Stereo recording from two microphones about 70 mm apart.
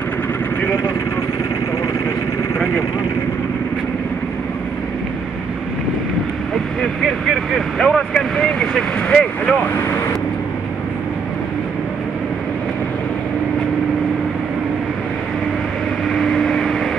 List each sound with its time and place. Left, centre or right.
0.6 s speech: left
7.8 s vehicle: centre
16.1 s vehicle: centre